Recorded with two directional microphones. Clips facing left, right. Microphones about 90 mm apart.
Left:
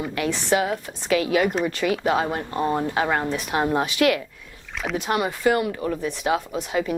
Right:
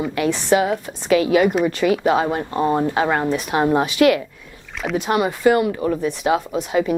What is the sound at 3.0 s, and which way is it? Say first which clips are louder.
Speech: right 4 dB; 60° right (ahead or behind).